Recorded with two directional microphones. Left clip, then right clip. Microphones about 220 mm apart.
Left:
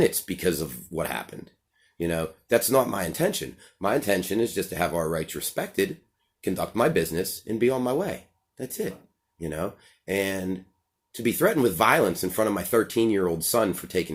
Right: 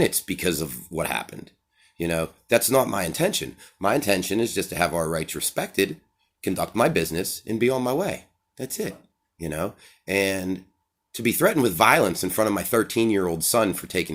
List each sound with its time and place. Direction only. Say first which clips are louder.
0.0 s speech: even; 25° right (ahead or behind)